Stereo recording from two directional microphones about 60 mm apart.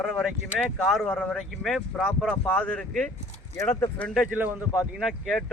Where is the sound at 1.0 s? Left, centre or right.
Centre.